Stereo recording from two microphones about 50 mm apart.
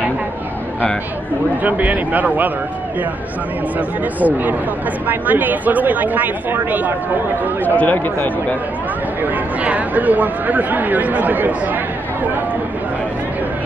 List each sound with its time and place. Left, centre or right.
1.6 s speech: right
4.2 s speech: right
7.6 s speech: left
9.2 s speech: right